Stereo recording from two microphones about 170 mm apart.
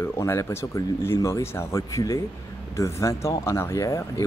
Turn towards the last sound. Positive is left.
turn(degrees=15)  # may be behind; listen again after turning